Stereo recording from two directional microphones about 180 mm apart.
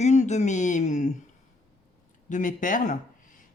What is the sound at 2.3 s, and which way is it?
Speech, 45° left (ahead or behind).